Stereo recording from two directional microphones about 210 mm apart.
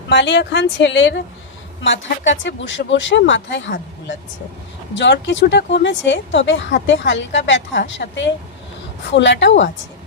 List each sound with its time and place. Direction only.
0.1 s speech: 55° left (ahead or behind)
4.9 s speech: 55° left (ahead or behind)